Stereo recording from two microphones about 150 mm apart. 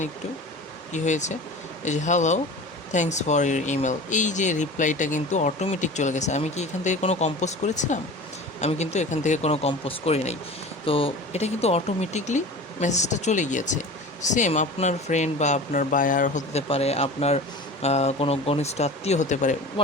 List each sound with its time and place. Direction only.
0.9 s speech: 50° left (ahead or behind)